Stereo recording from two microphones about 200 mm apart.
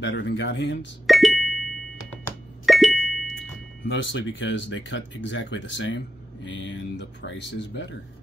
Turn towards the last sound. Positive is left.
turn(degrees=65)  # may be behind; listen again after turning